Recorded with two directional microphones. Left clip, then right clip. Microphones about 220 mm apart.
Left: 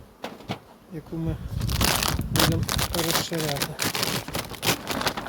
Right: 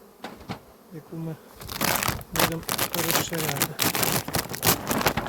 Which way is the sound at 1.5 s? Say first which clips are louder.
Left 1 dB; 10° left (ahead or behind).